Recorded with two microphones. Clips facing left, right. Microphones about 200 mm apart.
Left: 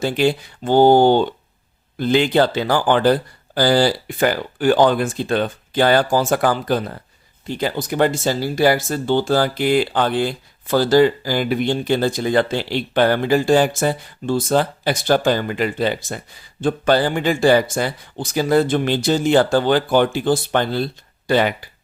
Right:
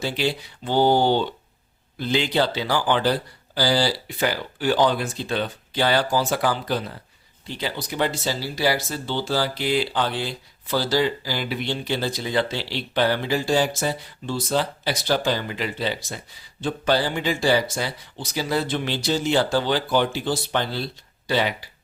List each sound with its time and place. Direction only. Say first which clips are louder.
0.0 s speech: left 7 dB; 50° left (ahead or behind)